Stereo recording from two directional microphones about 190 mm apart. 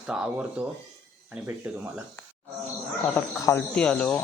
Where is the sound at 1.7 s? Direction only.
5° right (ahead or behind).